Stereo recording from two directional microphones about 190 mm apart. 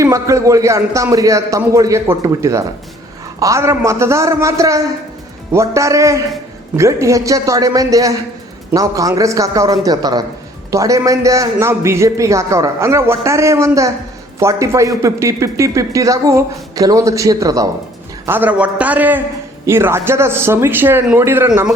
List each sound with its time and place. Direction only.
0.0 s speech: 15° right (ahead or behind)